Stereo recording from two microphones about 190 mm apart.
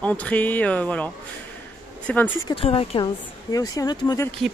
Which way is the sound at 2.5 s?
30° left (ahead or behind).